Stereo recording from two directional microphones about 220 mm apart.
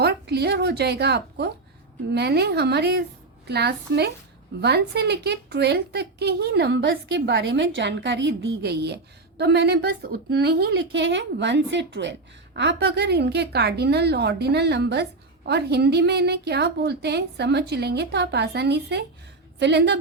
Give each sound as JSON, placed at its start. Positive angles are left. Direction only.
{"t": 0.0, "sound": "a woman's voice", "side_deg": -45}